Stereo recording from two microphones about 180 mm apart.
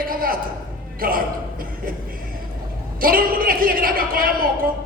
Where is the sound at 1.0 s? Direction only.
50° right (ahead or behind).